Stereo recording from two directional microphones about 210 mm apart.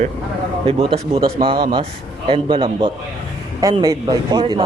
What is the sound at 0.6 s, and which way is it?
Speech, 25° right (ahead or behind).